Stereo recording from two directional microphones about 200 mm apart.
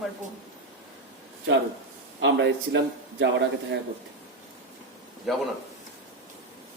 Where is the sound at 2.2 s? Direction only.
60° right (ahead or behind).